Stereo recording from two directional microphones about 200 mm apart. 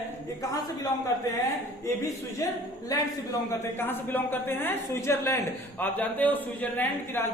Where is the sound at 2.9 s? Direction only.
15° left (ahead or behind).